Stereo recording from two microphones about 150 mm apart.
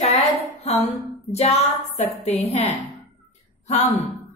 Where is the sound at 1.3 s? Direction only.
45° left (ahead or behind).